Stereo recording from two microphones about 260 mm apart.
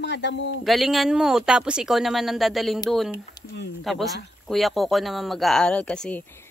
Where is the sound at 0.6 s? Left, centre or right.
Centre.